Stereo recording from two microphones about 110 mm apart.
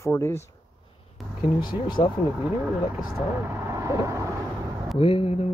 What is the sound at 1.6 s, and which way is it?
Speech, 40° left (ahead or behind).